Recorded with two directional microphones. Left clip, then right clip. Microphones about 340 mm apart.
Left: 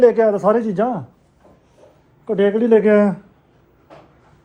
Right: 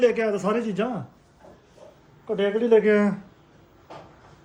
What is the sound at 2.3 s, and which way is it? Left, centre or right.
Speech, left.